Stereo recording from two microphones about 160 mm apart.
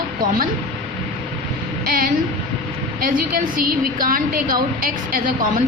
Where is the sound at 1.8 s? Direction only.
65° right (ahead or behind).